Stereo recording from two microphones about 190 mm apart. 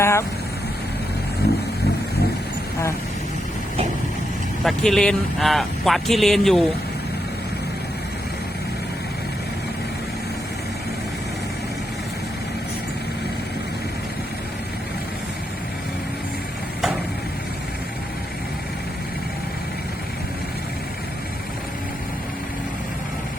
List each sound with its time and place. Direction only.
0.0 s vehicle: 15° left (ahead or behind)
1.4 s vehicle: 60° left (ahead or behind)
4.6 s speech: centre (ahead or behind)